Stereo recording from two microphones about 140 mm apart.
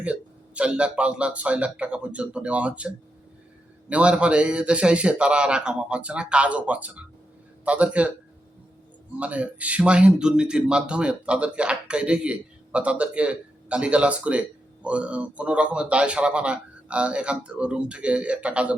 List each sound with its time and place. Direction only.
0.0 s speech: 10° right (ahead or behind)
9.1 s speech: 10° right (ahead or behind)